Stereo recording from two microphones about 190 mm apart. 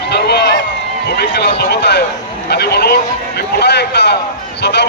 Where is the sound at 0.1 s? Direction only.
60° left (ahead or behind).